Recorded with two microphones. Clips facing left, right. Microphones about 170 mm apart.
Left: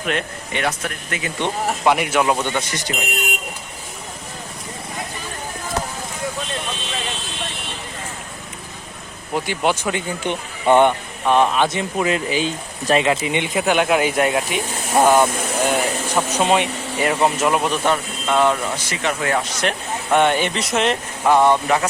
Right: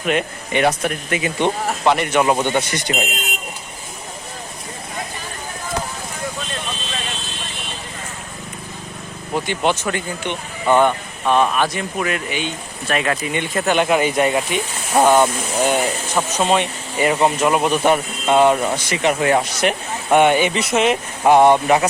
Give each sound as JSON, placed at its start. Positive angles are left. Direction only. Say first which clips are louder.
{"t": 0.0, "sound": "speech", "louder": "right 4 dB", "side_deg": -5}
{"t": 0.5, "sound": "speech", "louder": "right 6 dB", "side_deg": -15}
{"t": 1.6, "sound": "speech", "louder": "even", "side_deg": 5}
{"t": 2.4, "sound": "speech", "louder": "right 4 dB", "side_deg": -25}
{"t": 9.3, "sound": "speech", "louder": "right 1 dB", "side_deg": 10}
{"t": 10.2, "sound": "speech", "louder": "left 2 dB", "side_deg": 25}
{"t": 16.3, "sound": "speech", "louder": "even", "side_deg": 10}
{"t": 17.0, "sound": "speech", "louder": "right 2 dB", "side_deg": 0}
{"t": 17.8, "sound": "speech", "louder": "right 4 dB", "side_deg": -15}
{"t": 21.2, "sound": "speech", "louder": "right 3 dB", "side_deg": -20}